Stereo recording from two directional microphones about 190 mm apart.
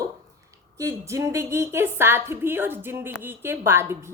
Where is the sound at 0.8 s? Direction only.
15° right (ahead or behind).